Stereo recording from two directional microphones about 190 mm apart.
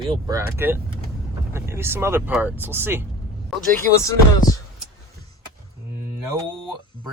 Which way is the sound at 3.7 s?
15° left (ahead or behind).